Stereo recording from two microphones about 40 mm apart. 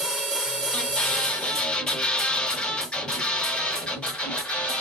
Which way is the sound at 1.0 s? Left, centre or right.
Centre.